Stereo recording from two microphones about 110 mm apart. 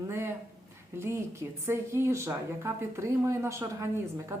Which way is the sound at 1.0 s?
25° right (ahead or behind).